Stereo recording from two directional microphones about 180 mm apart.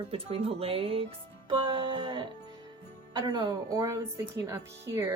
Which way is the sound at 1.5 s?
30° right (ahead or behind).